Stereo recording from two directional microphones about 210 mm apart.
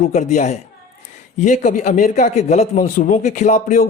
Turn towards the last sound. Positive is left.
turn(degrees=35)  # may be behind; listen again after turning